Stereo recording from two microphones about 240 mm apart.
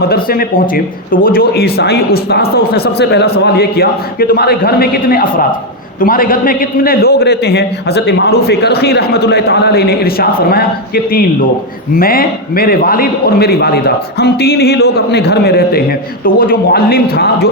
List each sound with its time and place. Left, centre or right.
0.1 s a man's voice: left